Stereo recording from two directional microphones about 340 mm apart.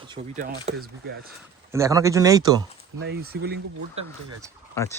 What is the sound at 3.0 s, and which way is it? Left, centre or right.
Speech, right.